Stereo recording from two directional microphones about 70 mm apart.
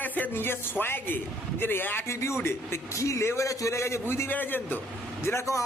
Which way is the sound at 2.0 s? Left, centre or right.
Left.